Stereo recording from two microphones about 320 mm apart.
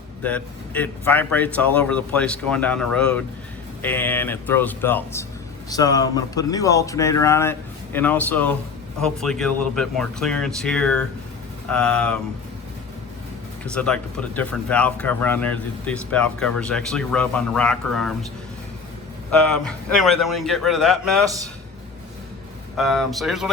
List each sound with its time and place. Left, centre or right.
0.2 s speech: centre
13.7 s speech: centre
19.3 s speech: centre
21.2 s a man's voice: centre
22.8 s speech: centre